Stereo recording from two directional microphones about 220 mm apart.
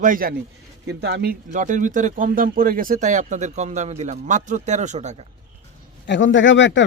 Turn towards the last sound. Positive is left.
turn(degrees=55)  # may be behind; listen again after turning